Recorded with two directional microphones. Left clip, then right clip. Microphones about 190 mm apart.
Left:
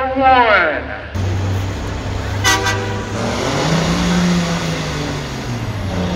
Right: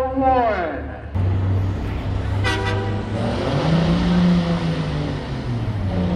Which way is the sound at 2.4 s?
15° left (ahead or behind).